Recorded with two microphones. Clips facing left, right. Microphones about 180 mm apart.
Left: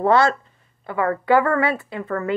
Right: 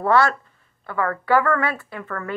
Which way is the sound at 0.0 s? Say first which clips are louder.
Left 2 dB; 20° left (ahead or behind).